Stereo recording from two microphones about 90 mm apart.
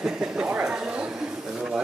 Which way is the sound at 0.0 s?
10° right (ahead or behind).